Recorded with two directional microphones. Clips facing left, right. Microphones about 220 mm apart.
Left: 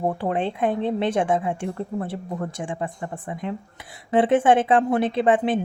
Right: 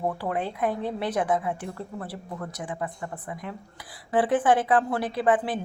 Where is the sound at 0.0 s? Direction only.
25° left (ahead or behind).